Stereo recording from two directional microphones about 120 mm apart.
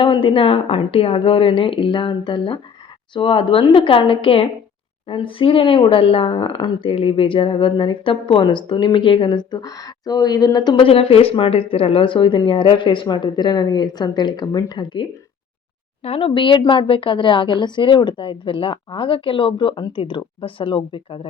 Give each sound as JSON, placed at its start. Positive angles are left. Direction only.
{"t": 0.0, "sound": "speech", "side_deg": 45}
{"t": 10.8, "sound": "speech", "side_deg": 50}
{"t": 16.0, "sound": "speech", "side_deg": 50}